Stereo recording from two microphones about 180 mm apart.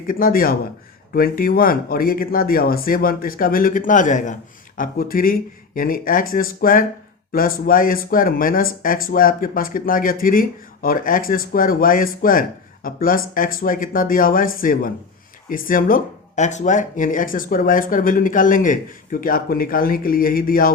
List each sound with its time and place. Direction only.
0.1 s speech: 55° left (ahead or behind)